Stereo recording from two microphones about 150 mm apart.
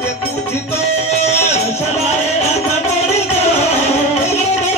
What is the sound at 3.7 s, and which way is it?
Music, 45° left (ahead or behind).